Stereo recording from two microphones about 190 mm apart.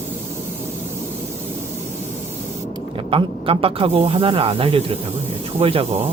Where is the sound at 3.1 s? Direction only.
30° right (ahead or behind).